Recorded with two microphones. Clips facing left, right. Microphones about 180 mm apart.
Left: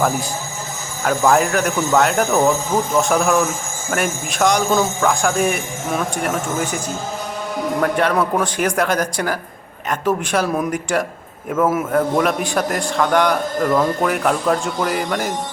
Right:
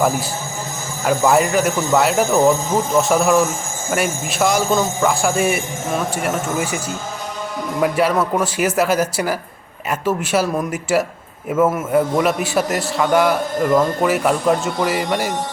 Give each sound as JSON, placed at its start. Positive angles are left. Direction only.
{"t": 1.0, "sound": "a man's voice", "side_deg": -5}
{"t": 7.8, "sound": "a man's voice", "side_deg": -5}